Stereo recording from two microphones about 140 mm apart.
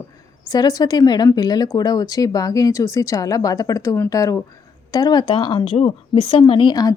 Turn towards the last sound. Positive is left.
turn(degrees=30)  # may be behind; listen again after turning